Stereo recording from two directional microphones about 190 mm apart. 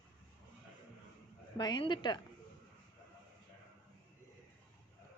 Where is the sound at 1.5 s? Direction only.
25° left (ahead or behind).